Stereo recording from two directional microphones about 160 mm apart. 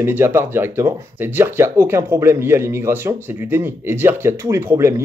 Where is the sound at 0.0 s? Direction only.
15° right (ahead or behind).